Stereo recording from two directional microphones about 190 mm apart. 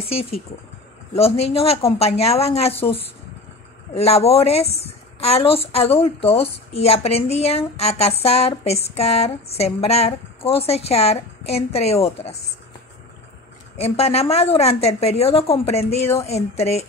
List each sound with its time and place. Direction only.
0.0 s speech: 30° left (ahead or behind)
13.7 s speech: 35° left (ahead or behind)